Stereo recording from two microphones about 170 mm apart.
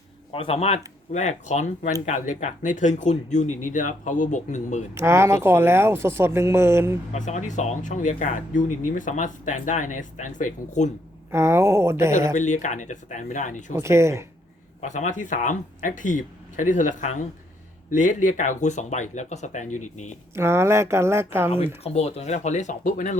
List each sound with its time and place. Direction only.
0.3 s speech: 35° left (ahead or behind)
4.9 s speech: 15° right (ahead or behind)
7.1 s speech: 45° left (ahead or behind)
11.3 s speech: 15° right (ahead or behind)
12.4 s speech: 45° left (ahead or behind)
13.7 s speech: 15° right (ahead or behind)
14.8 s speech: 45° left (ahead or behind)
20.3 s speech: 15° right (ahead or behind)
21.8 s speech: 40° left (ahead or behind)